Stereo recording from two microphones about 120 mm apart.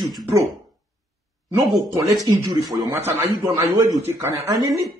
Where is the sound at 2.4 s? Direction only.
30° right (ahead or behind).